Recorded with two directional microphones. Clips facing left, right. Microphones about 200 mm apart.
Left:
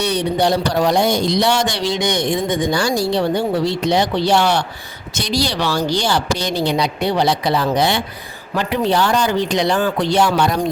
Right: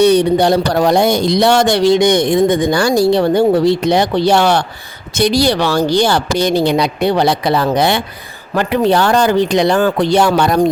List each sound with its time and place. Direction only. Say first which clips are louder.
0.0 s speech: right 8 dB; 55° right (ahead or behind)